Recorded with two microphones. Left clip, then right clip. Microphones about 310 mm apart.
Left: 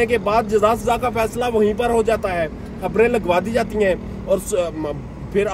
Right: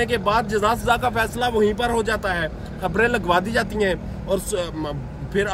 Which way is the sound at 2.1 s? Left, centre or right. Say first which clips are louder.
Left 3 dB; centre.